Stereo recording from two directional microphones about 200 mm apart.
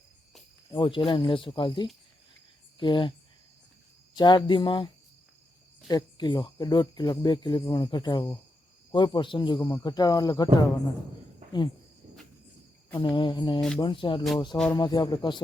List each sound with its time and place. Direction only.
0.7 s speech: 25° left (ahead or behind)
4.1 s speech: 20° left (ahead or behind)
5.9 s speech: 20° left (ahead or behind)
13.0 s speech: 20° left (ahead or behind)